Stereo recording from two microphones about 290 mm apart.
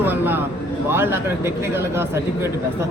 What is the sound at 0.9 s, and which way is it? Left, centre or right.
Speech, centre.